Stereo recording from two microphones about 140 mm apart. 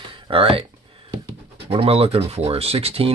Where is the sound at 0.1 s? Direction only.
40° right (ahead or behind).